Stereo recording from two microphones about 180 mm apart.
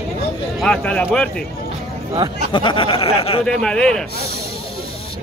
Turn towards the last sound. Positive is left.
turn(degrees=5)  # may be behind; listen again after turning